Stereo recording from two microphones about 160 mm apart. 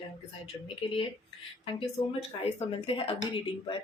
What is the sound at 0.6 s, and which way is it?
A woman's voice, 35° left (ahead or behind).